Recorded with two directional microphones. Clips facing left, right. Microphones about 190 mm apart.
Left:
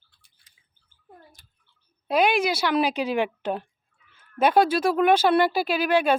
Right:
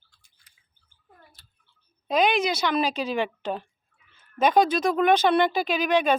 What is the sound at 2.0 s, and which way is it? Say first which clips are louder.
Speech: left 1 dB; 10° left (ahead or behind).